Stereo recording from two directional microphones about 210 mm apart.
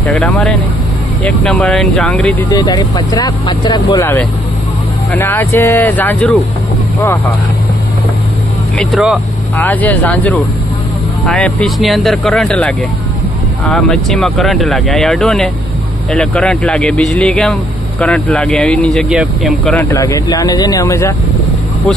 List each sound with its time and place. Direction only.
0.0 s speech: 5° left (ahead or behind)
2.5 s speech: 20° left (ahead or behind)
8.7 s speech: centre (ahead or behind); by 21.1 s 15° left (ahead or behind)